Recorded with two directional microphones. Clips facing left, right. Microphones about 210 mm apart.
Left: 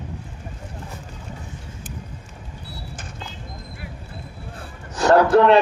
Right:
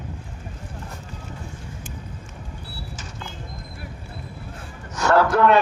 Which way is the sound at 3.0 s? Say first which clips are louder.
Left 1 dB; 55° left (ahead or behind).